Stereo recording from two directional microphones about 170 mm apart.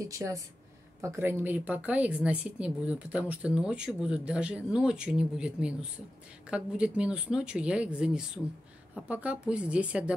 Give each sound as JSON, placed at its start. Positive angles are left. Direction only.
{"t": 0.0, "sound": "speech", "side_deg": -20}